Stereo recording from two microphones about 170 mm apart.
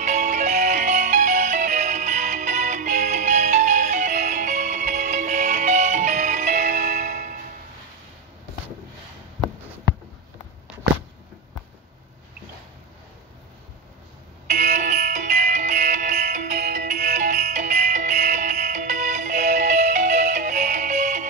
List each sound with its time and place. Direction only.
0.0 s music: 45° right (ahead or behind)
14.5 s music: 50° right (ahead or behind)
16.5 s music: 65° right (ahead or behind)
16.9 s music: 45° right (ahead or behind)